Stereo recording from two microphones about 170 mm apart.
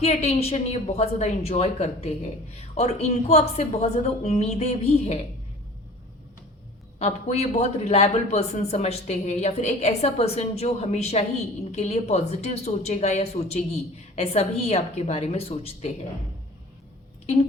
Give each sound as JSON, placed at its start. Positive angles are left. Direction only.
{"t": 0.0, "sound": "speech", "side_deg": 40}
{"t": 7.0, "sound": "speech", "side_deg": 40}